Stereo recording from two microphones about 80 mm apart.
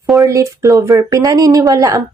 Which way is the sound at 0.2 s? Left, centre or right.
Right.